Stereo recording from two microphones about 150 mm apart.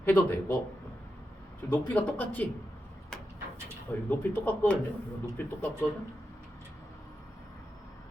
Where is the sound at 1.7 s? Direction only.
10° left (ahead or behind).